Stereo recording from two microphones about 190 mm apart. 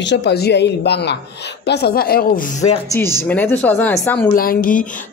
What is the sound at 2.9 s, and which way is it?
Speech, 15° left (ahead or behind).